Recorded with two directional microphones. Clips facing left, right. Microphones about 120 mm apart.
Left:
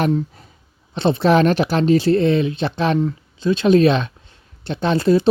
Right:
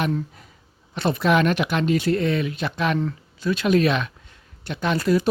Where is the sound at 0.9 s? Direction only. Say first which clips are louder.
Left 5 dB; 25° left (ahead or behind).